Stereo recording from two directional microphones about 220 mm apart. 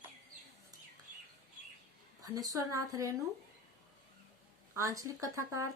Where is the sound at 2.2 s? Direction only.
15° right (ahead or behind).